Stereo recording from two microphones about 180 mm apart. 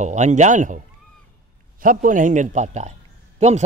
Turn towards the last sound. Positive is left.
turn(degrees=-40)  # may be behind; listen again after turning